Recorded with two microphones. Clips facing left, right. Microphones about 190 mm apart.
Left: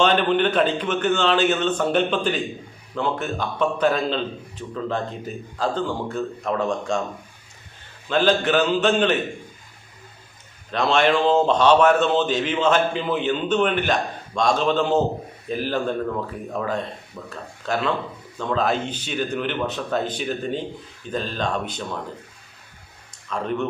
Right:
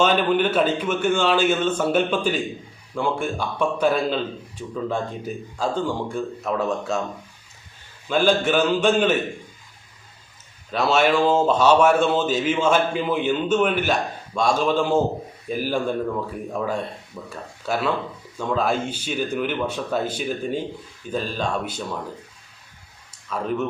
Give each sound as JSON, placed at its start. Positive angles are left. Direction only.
{"t": 0.0, "sound": "a man's voice", "side_deg": -5}
{"t": 8.1, "sound": "a man's voice", "side_deg": -10}
{"t": 10.7, "sound": "a man's voice", "side_deg": -5}
{"t": 23.3, "sound": "speech", "side_deg": -5}